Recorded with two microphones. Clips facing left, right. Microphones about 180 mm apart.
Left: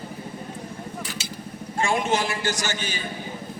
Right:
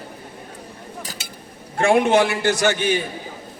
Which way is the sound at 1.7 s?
60° right (ahead or behind).